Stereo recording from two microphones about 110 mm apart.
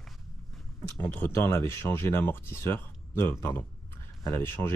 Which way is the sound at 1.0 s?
20° left (ahead or behind).